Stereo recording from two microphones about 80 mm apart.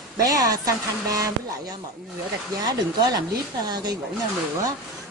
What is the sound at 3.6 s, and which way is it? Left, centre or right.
Speech, right.